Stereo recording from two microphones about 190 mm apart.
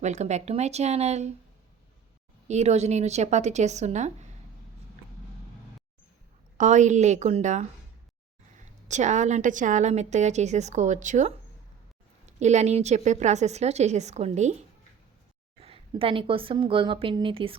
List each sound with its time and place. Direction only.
0.0 s a woman's voice: 40° right (ahead or behind)
2.5 s a woman's voice: 35° right (ahead or behind)
6.6 s a woman's voice: 40° right (ahead or behind)
8.9 s a woman's voice: 40° right (ahead or behind)
15.6 s a woman's voice: 30° right (ahead or behind)